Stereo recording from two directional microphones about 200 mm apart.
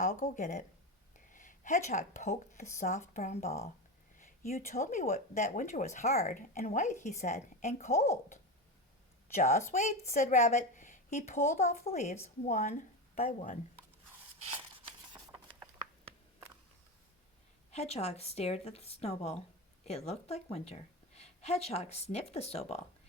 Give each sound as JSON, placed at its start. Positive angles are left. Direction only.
{"t": 0.0, "sound": "a woman's voice", "side_deg": 35}
{"t": 14.8, "sound": "a sound", "side_deg": -25}
{"t": 17.7, "sound": "a woman's voice", "side_deg": 30}